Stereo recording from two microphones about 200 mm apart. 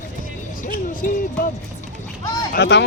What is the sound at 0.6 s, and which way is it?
Music, 45° left (ahead or behind).